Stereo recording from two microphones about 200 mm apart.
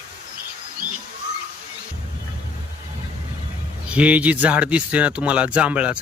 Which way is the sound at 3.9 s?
5° right (ahead or behind).